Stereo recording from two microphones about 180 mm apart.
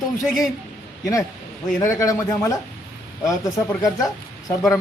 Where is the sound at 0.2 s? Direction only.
Centre (ahead or behind).